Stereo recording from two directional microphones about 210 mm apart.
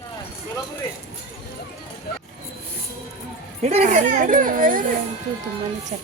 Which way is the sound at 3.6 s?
35° right (ahead or behind).